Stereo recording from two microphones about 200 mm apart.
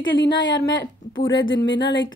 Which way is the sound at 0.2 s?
60° left (ahead or behind).